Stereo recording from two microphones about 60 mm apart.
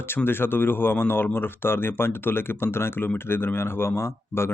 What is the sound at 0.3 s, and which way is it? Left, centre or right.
Speech, left.